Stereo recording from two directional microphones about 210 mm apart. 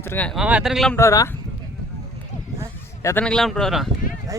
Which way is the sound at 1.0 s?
15° left (ahead or behind).